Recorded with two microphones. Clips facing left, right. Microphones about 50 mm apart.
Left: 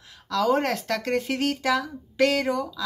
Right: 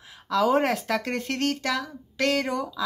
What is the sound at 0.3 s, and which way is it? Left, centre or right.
Speech, centre.